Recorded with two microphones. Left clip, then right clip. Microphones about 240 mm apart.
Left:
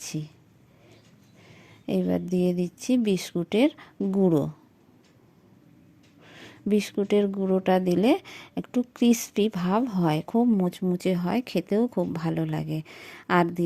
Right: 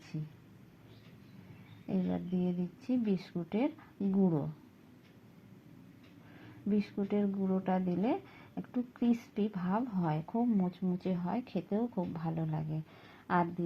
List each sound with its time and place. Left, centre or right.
1.9 s speech: left
6.4 s speech: left